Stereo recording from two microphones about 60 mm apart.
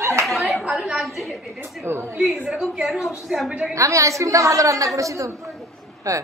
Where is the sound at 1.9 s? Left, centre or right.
Right.